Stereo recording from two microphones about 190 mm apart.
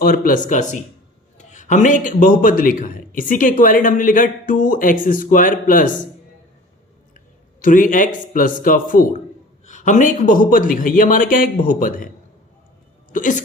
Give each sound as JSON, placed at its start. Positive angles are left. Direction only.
{"t": 0.0, "sound": "a man's voice", "side_deg": 50}
{"t": 7.6, "sound": "a man's voice", "side_deg": 45}
{"t": 13.1, "sound": "a man's voice", "side_deg": 45}